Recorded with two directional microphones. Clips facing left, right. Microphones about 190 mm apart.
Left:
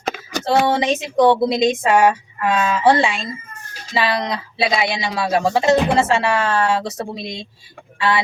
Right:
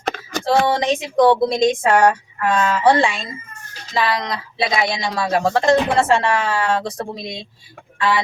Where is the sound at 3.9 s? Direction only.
5° left (ahead or behind).